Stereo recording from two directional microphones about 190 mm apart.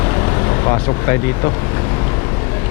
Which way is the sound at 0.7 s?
20° left (ahead or behind).